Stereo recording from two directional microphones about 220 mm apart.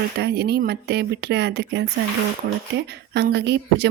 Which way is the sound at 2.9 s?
50° right (ahead or behind).